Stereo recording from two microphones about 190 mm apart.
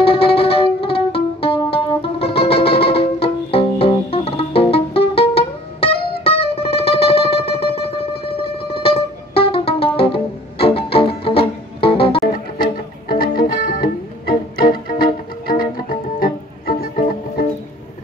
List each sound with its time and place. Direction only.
0.0 s music: 30° left (ahead or behind)
13.1 s music: 50° left (ahead or behind)
15.4 s music: 50° left (ahead or behind)